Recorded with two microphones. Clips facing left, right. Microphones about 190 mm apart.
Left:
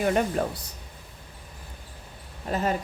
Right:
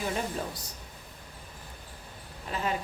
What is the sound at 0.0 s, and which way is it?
Speech, 65° left (ahead or behind).